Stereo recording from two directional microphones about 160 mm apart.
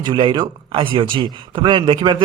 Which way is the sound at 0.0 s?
30° right (ahead or behind).